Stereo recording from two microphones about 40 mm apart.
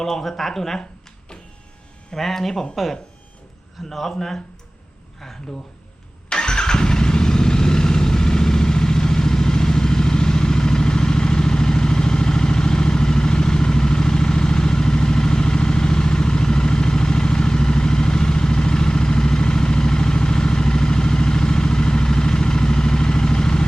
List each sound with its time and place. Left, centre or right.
0.0 s speech: centre
2.1 s speech: centre
6.2 s vehicle: centre